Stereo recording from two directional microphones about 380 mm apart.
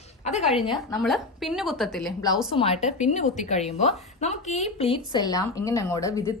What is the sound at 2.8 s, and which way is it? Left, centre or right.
A woman's voice, centre.